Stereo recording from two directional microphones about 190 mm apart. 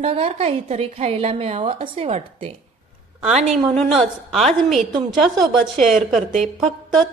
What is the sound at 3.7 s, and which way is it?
A woman's voice, centre (ahead or behind).